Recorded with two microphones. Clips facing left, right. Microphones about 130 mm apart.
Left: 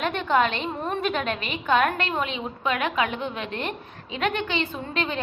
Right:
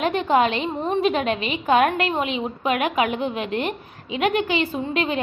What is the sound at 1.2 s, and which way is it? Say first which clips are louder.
A woman's voice: right 5 dB; 40° left (ahead or behind).